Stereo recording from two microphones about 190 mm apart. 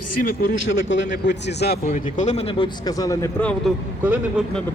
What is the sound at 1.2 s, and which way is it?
Speech, 65° left (ahead or behind).